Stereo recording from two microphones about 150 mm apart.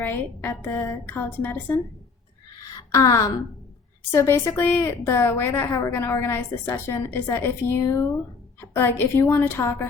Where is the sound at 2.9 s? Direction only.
20° left (ahead or behind).